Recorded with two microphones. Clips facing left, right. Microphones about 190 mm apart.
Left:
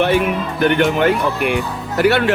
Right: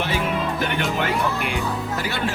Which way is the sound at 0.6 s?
60° left (ahead or behind).